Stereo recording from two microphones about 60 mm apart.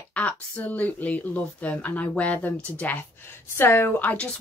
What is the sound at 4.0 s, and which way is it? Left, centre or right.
Speech, left.